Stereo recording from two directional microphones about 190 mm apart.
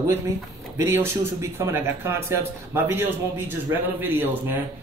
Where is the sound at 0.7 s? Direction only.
10° right (ahead or behind).